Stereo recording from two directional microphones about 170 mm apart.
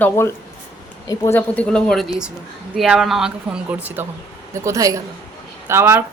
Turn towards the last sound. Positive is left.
turn(degrees=-15)  # may be behind; listen again after turning